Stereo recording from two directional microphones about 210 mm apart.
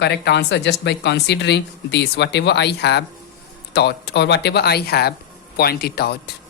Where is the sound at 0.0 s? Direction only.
50° left (ahead or behind).